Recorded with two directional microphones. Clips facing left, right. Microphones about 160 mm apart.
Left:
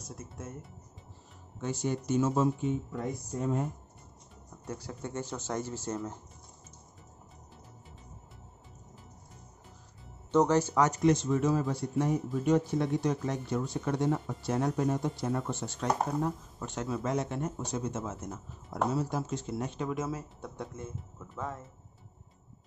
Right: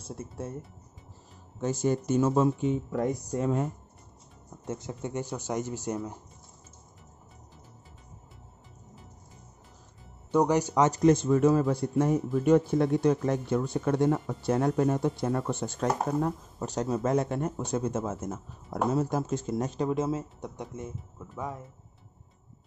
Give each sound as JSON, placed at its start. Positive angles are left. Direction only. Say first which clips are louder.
{"t": 0.0, "sound": "speech", "louder": "right 6 dB", "side_deg": -30}
{"t": 1.6, "sound": "speech", "louder": "right 5 dB", "side_deg": -45}
{"t": 2.7, "sound": "speech", "louder": "right 5 dB", "side_deg": -75}
{"t": 4.6, "sound": "speech", "louder": "right 4 dB", "side_deg": -20}
{"t": 10.3, "sound": "speech", "louder": "right 1 dB", "side_deg": -15}
{"t": 10.9, "sound": "speech", "louder": "right 4 dB", "side_deg": -40}